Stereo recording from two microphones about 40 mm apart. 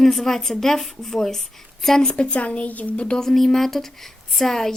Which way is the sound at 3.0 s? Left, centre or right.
Centre.